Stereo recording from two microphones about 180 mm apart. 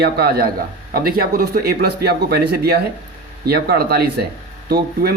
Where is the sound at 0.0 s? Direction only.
60° right (ahead or behind).